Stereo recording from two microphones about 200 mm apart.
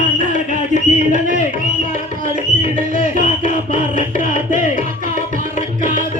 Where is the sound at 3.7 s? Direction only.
45° right (ahead or behind).